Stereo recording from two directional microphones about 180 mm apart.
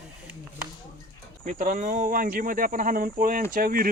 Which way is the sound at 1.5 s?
45° right (ahead or behind).